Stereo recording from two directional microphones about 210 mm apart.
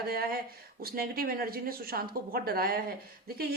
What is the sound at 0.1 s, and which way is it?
A woman's voice, 45° right (ahead or behind).